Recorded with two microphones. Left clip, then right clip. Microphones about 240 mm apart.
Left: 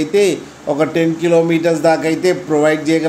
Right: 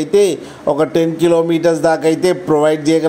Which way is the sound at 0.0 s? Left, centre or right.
Right.